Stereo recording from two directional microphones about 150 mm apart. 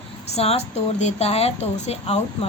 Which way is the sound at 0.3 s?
45° left (ahead or behind).